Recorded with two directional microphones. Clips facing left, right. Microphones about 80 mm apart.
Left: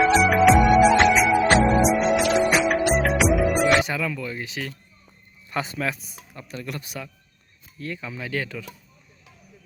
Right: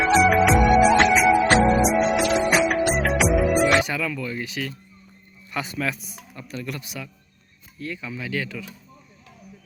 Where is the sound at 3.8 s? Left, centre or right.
Left.